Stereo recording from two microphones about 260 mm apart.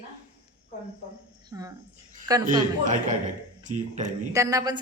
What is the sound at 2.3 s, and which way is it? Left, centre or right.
Speech, centre.